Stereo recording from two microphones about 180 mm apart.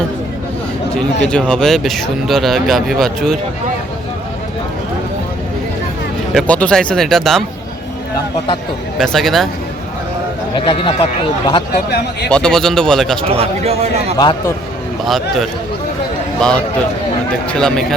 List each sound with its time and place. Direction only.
0.9 s speech: 5° left (ahead or behind)
6.3 s speech: 5° left (ahead or behind)
9.0 s speech: centre (ahead or behind)
10.5 s speech: 30° left (ahead or behind)
12.3 s speech: 5° left (ahead or behind)
13.2 s a man's voice: 35° right (ahead or behind)
14.2 s speech: 25° left (ahead or behind)
15.0 s speech: centre (ahead or behind)